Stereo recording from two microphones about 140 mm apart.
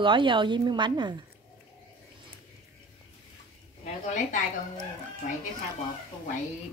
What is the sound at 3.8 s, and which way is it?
Speech, 65° left (ahead or behind).